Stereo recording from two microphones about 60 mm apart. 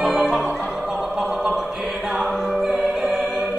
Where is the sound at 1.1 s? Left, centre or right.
Centre.